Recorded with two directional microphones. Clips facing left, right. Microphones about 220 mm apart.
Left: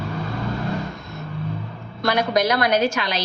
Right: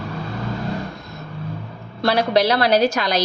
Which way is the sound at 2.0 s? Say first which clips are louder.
Right 3 dB; 30° right (ahead or behind).